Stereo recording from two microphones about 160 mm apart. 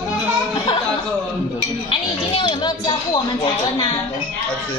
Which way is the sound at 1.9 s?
30° left (ahead or behind).